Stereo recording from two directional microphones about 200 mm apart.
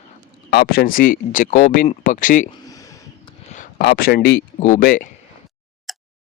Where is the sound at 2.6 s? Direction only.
15° left (ahead or behind).